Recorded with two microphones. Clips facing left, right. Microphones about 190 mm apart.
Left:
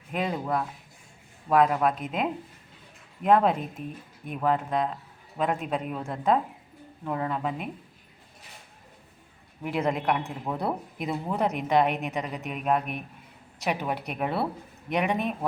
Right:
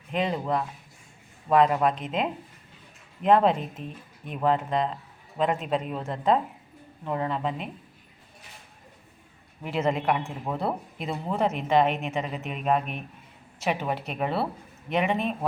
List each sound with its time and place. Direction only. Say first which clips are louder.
0.1 s speech: right 2 dB; 5° left (ahead or behind)
3.8 s speech: left 1 dB; 30° right (ahead or behind)
4.4 s speech: right 1 dB; 5° left (ahead or behind)
9.6 s speech: right 1 dB; 15° left (ahead or behind)
10.0 s speech: right 1 dB; 5° right (ahead or behind)
11.1 s speech: right 1 dB; 10° left (ahead or behind)